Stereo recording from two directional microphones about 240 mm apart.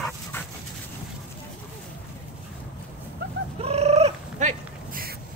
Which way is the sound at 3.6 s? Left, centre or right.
Right.